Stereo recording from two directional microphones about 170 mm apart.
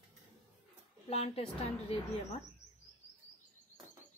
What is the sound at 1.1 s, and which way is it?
Speech, 40° left (ahead or behind).